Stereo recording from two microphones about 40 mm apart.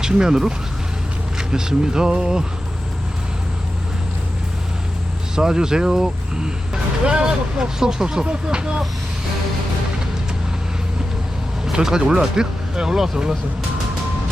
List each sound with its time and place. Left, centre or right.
0.0 s speech: centre
5.4 s speech: centre
7.0 s speech: right
11.7 s speech: centre